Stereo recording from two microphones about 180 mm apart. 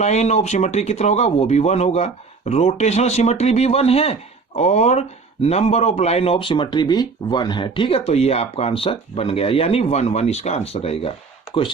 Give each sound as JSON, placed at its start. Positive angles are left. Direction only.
{"t": 0.0, "sound": "speech", "side_deg": 40}